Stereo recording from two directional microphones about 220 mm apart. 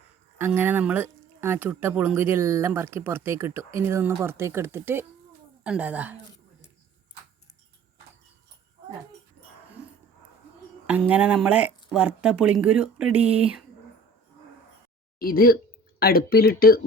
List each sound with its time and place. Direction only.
0.3 s speech: 10° right (ahead or behind)
10.8 s speech: 5° right (ahead or behind)
13.2 s speech: 25° right (ahead or behind)
15.2 s speech: 40° left (ahead or behind)